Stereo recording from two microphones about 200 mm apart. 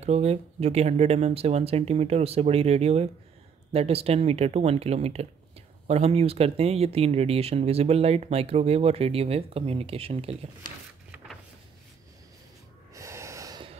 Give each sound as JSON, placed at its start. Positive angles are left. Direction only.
{"t": 0.0, "sound": "speech", "side_deg": -30}
{"t": 12.9, "sound": "snort", "side_deg": -15}